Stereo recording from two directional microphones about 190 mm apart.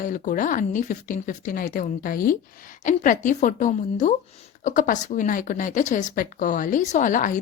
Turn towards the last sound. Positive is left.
turn(degrees=45)  # may be behind; listen again after turning